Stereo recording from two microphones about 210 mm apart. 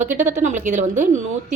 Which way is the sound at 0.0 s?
35° right (ahead or behind).